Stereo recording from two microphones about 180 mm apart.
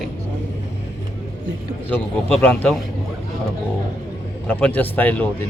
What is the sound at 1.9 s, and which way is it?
Speech, 10° left (ahead or behind).